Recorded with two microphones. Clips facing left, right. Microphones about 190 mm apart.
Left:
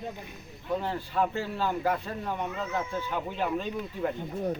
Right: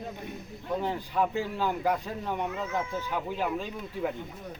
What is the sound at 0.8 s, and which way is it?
A man's voice, 15° right (ahead or behind).